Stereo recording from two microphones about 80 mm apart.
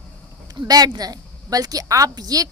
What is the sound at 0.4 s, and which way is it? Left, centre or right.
A woman's voice, right.